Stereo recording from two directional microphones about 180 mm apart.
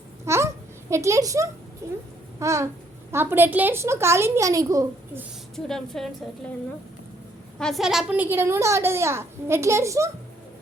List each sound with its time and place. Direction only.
0.3 s a sound: 15° right (ahead or behind)
1.8 s a woman's voice: 15° right (ahead or behind)
5.5 s a woman's voice: centre (ahead or behind)
7.6 s a woman's voice: centre (ahead or behind); by 10.1 s 15° right (ahead or behind)